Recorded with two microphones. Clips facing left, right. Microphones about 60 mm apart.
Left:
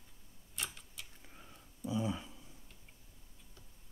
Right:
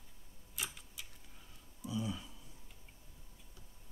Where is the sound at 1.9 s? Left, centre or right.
Left.